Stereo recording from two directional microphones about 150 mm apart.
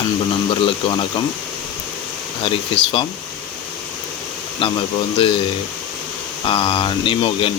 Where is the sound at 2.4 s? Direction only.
35° left (ahead or behind).